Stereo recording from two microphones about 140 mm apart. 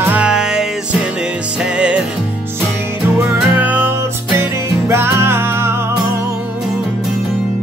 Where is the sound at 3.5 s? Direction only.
10° right (ahead or behind).